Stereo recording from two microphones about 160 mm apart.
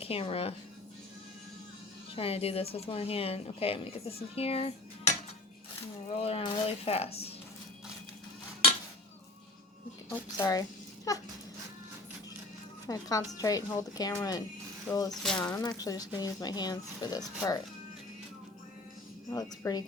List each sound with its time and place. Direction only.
0.0 s speech: 35° left (ahead or behind)
2.1 s speech: 40° left (ahead or behind)
6.1 s speech: 35° left (ahead or behind)
10.3 s a child's voice: 20° left (ahead or behind)
12.9 s speech: 20° left (ahead or behind)
15.1 s speech: centre (ahead or behind)
15.8 s speech: 25° left (ahead or behind)
19.3 s speech: 25° left (ahead or behind)